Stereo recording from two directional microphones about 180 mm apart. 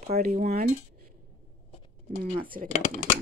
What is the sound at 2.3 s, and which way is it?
Speech, 30° right (ahead or behind).